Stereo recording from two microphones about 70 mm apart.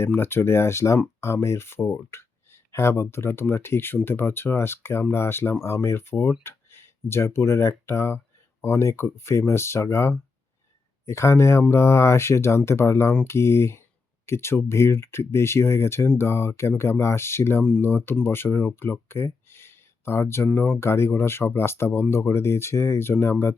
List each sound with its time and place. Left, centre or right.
0.0 s speech: left